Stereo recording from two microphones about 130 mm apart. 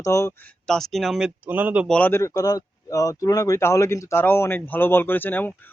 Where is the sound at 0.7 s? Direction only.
Centre (ahead or behind).